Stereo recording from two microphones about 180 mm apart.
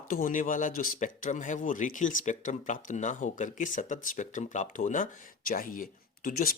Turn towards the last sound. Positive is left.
turn(degrees=50)  # may be behind; listen again after turning